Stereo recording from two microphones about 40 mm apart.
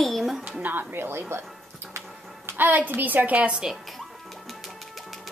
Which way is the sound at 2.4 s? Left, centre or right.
Right.